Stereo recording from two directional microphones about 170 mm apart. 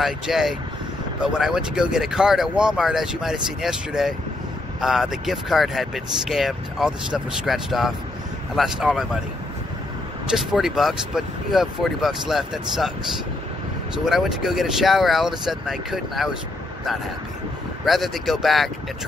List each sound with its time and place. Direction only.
0.0 s speech: centre (ahead or behind)
10.3 s speech: 5° right (ahead or behind)
14.0 s speech: centre (ahead or behind)
17.8 s speech: centre (ahead or behind)